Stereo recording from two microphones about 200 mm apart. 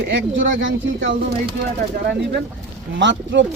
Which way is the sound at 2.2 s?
55° right (ahead or behind).